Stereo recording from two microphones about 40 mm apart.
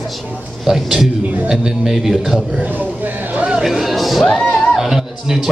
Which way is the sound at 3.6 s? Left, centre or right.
Centre.